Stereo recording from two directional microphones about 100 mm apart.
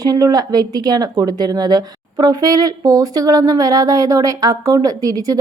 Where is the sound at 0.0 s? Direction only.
40° right (ahead or behind).